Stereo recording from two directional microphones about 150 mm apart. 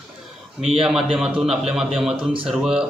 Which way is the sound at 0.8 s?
5° right (ahead or behind).